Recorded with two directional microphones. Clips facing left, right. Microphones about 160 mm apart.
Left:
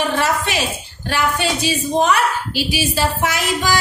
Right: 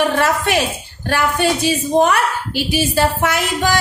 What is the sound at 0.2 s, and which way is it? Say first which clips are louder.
A woman's voice: right 3 dB; 55° right (ahead or behind).